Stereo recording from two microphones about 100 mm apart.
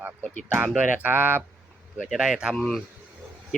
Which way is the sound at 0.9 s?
15° right (ahead or behind).